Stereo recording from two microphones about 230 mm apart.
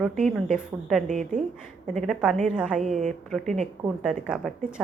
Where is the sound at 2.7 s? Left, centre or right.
Right.